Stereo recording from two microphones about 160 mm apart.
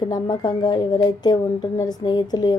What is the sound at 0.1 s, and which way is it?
A woman's voice, 25° left (ahead or behind).